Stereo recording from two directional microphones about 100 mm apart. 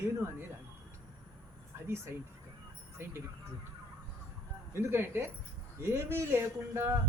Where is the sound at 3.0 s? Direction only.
25° right (ahead or behind).